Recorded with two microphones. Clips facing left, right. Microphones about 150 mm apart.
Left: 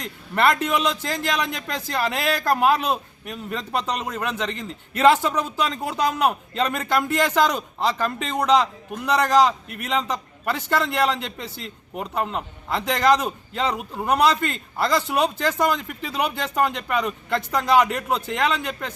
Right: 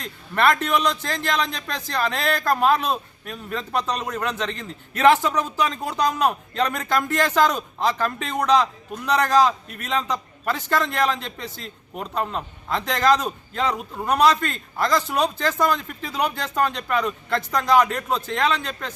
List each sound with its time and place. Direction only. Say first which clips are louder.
0.0 s a man's voice: even; 15° left (ahead or behind)